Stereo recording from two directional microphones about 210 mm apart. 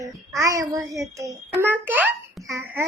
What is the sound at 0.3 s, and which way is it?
A child's voice, 15° right (ahead or behind).